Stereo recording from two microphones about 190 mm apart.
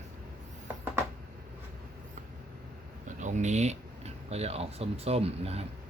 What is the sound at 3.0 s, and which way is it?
Speech, 40° right (ahead or behind).